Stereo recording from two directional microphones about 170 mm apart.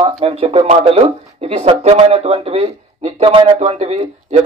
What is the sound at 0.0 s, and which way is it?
Speech, 35° right (ahead or behind).